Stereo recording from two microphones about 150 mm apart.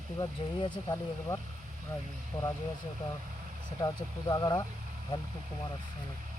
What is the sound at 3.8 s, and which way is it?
Speech, 25° left (ahead or behind).